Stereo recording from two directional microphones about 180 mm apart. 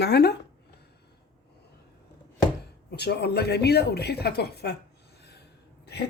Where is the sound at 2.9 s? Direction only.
65° left (ahead or behind).